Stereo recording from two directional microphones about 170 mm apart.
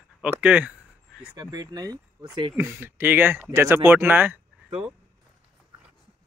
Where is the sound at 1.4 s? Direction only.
25° right (ahead or behind).